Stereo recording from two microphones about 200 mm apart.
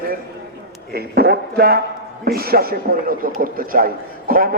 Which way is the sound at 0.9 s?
50° right (ahead or behind).